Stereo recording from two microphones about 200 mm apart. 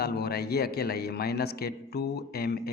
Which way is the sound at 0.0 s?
50° left (ahead or behind).